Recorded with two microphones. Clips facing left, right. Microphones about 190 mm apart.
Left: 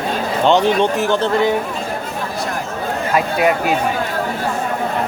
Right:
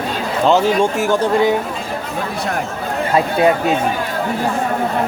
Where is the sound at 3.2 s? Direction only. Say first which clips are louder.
Right 2 dB; 30° right (ahead or behind).